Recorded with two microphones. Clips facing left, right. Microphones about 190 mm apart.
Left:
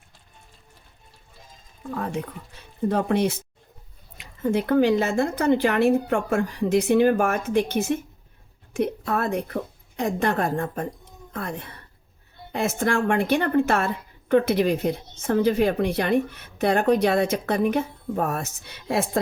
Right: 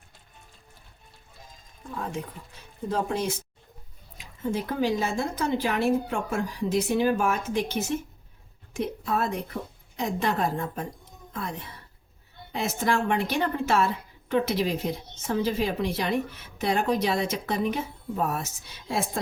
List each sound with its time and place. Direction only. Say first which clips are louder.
2.9 s a woman's voice: left 5 dB; 65° left (ahead or behind)